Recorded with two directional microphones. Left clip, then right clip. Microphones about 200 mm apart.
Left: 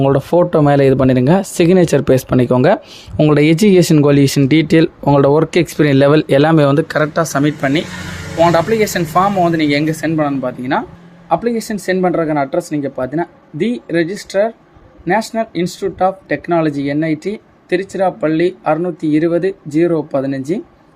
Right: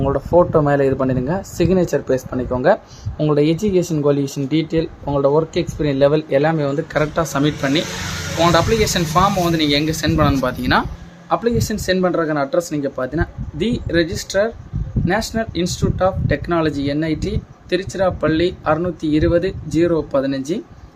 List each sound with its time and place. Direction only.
0.0 s speech: 35° left (ahead or behind)
6.9 s speech: 25° left (ahead or behind)
10.2 s speech: centre (ahead or behind)